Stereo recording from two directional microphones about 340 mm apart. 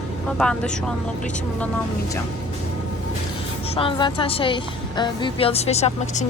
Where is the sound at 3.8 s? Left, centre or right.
Centre.